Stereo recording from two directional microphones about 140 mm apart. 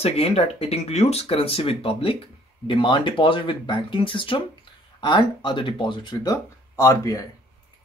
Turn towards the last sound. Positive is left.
turn(degrees=20)  # may be behind; listen again after turning